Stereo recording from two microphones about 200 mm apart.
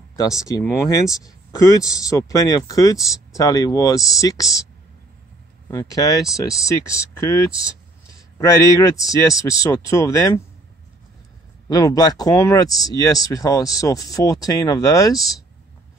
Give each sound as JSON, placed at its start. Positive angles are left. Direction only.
{"t": 0.2, "sound": "speech", "side_deg": 15}
{"t": 5.7, "sound": "speech", "side_deg": 15}
{"t": 11.7, "sound": "speech", "side_deg": 20}